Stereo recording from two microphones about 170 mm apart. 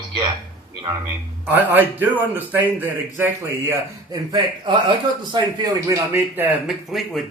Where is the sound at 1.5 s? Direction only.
10° right (ahead or behind); by 4.8 s 25° right (ahead or behind).